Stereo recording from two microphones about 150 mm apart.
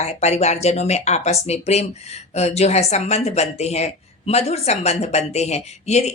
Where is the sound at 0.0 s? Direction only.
45° left (ahead or behind).